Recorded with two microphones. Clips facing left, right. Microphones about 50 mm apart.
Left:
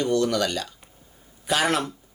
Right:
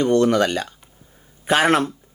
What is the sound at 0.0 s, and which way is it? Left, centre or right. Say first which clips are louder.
Speech: right 6 dB; right.